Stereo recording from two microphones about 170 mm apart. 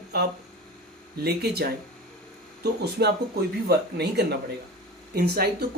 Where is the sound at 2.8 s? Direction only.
75° right (ahead or behind).